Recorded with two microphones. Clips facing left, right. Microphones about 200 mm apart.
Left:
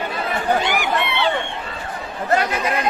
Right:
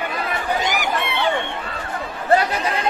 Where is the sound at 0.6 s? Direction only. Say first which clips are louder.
Left 1 dB; 45° right (ahead or behind).